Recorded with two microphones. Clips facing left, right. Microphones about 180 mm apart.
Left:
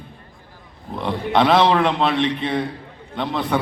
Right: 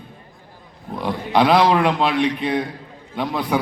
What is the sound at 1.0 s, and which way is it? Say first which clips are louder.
A man's voice: even; centre (ahead or behind).